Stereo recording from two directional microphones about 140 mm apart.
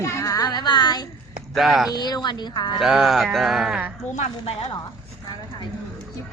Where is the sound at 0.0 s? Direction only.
20° left (ahead or behind).